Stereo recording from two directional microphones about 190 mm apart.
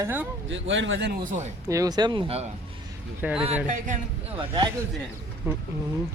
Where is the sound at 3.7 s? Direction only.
40° right (ahead or behind).